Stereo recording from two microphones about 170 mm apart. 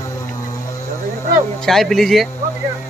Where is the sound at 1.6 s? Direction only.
Centre (ahead or behind).